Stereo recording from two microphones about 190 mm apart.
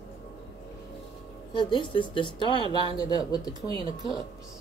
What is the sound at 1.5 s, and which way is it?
A woman's voice, 25° left (ahead or behind).